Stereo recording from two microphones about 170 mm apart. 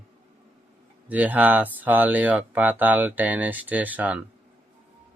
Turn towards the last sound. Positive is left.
turn(degrees=-10)  # may be behind; listen again after turning